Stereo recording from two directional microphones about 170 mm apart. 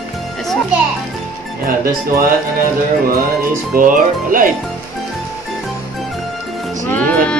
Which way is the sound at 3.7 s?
55° right (ahead or behind).